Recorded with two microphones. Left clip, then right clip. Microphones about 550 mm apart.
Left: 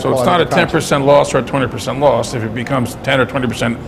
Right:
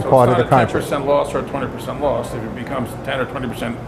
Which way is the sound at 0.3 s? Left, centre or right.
Left.